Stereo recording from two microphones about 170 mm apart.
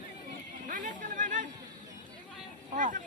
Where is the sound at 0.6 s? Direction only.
50° right (ahead or behind).